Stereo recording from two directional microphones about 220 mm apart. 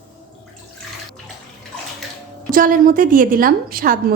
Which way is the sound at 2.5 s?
40° right (ahead or behind).